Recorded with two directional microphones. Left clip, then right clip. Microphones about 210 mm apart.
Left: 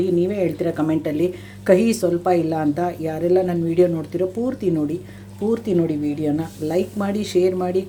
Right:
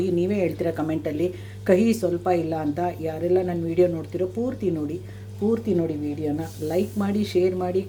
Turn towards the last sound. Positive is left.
turn(degrees=10)  # may be behind; listen again after turning